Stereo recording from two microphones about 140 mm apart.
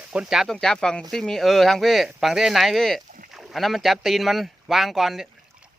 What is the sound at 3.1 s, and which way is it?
Rowboat, 75° right (ahead or behind).